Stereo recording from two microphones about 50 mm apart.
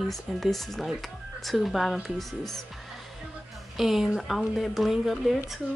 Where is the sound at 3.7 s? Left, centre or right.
Centre.